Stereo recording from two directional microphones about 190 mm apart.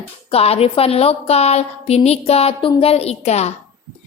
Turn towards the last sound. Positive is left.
turn(degrees=35)  # may be behind; listen again after turning